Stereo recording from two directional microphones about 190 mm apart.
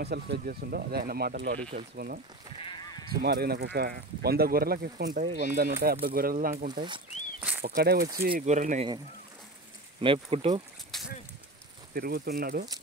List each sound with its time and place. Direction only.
0.0 s speech: 55° right (ahead or behind)
1.6 s speech: 35° right (ahead or behind)
2.5 s a sound: 25° left (ahead or behind)
3.1 s speech: 55° right (ahead or behind); by 8.8 s 40° right (ahead or behind)
10.0 s speech: 30° right (ahead or behind)
11.9 s speech: 55° right (ahead or behind)